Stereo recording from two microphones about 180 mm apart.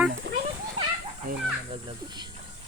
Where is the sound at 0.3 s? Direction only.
85° right.